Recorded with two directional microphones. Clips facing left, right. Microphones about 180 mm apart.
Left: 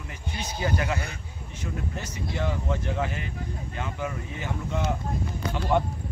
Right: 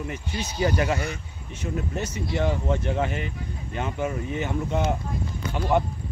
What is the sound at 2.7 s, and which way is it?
Speech, 25° right (ahead or behind).